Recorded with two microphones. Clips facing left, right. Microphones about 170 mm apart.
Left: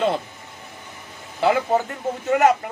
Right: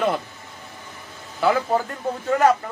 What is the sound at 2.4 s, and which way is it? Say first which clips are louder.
Speech: even; 20° left (ahead or behind).